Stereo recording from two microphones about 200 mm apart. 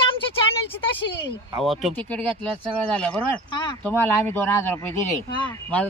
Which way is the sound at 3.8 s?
10° left (ahead or behind).